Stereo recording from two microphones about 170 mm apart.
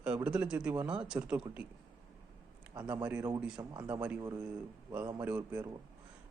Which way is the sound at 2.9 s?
10° right (ahead or behind).